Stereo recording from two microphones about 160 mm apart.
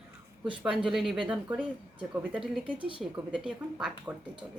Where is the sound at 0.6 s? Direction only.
Centre (ahead or behind).